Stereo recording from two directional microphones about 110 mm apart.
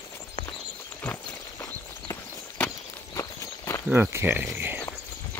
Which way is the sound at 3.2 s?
30° left (ahead or behind).